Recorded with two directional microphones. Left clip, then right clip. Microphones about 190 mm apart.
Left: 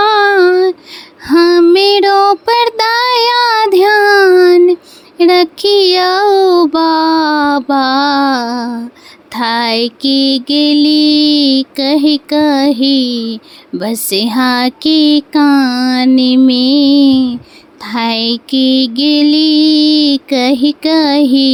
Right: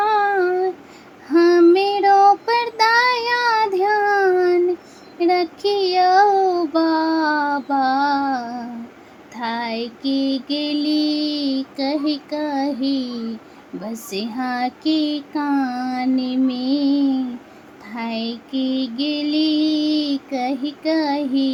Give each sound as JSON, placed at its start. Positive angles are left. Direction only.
{"t": 0.0, "sound": "child singing", "side_deg": 50}
{"t": 9.3, "sound": "mantra", "side_deg": 50}